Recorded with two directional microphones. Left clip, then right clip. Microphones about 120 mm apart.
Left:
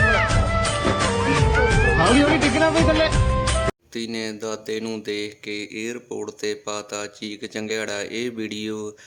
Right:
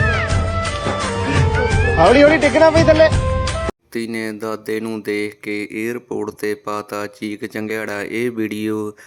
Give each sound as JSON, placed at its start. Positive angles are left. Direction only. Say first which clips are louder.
{"t": 0.0, "sound": "music", "louder": "even", "side_deg": 0}
{"t": 3.9, "sound": "speech", "louder": "right 5 dB", "side_deg": -45}